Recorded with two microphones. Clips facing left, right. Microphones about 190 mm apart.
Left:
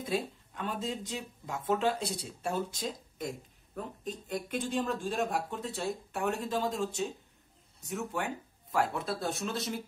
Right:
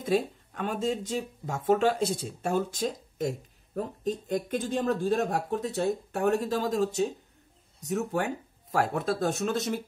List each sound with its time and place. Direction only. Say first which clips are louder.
0.0 s speech: right 7 dB; 45° right (ahead or behind)